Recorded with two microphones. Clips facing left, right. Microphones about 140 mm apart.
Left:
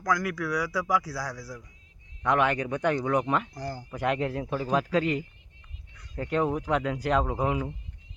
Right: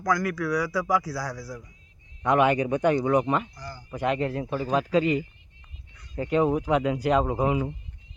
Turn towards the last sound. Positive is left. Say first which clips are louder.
# right 3 dB
turn(degrees=-5)  # may be behind; listen again after turning